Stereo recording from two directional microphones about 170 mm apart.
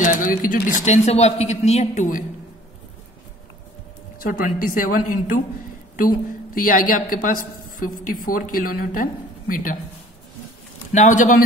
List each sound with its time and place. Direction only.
0.0 s speech: 50° left (ahead or behind)
4.2 s a woman's voice: 55° left (ahead or behind)
10.9 s speech: 45° left (ahead or behind)